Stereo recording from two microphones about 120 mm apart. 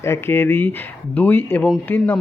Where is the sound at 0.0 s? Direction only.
20° left (ahead or behind).